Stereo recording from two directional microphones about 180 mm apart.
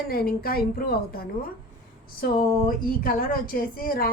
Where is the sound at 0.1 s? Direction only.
55° left (ahead or behind).